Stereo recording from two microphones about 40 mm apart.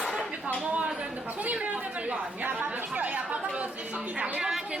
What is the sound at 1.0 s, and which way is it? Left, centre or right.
Chatter, right.